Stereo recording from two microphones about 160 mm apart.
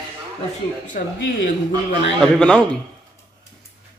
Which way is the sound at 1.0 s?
55° left (ahead or behind).